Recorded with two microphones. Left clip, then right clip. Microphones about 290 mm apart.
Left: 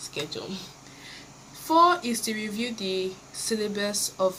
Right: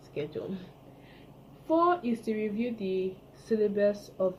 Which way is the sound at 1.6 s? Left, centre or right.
Left.